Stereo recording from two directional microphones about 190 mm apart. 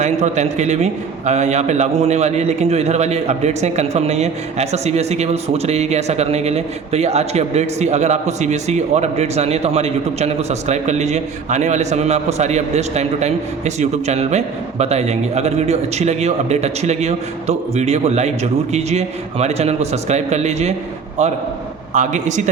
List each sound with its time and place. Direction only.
0.0 s a man's voice: 35° right (ahead or behind)